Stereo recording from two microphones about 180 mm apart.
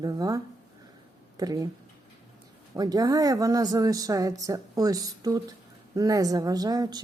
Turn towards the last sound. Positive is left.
turn(degrees=-20)  # may be behind; listen again after turning